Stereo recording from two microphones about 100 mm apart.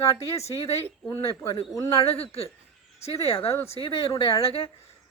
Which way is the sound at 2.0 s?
80° left.